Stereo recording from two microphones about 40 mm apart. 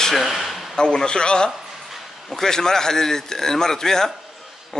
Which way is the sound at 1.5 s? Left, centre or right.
Centre.